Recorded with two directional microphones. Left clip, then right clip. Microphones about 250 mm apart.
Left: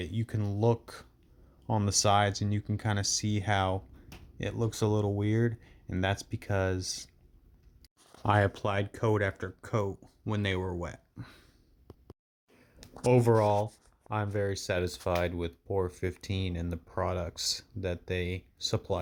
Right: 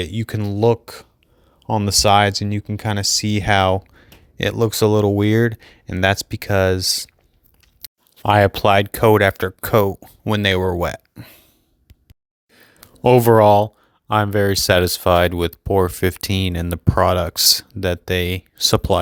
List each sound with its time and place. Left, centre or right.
0.0 s speech: right
12.5 s a sound: right
14.1 s speech: right